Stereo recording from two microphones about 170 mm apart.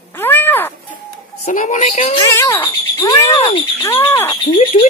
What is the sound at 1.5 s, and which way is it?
Speech, 50° left (ahead or behind).